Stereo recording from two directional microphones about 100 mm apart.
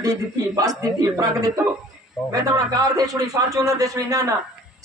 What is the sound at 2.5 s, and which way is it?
A man's voice, 40° right (ahead or behind).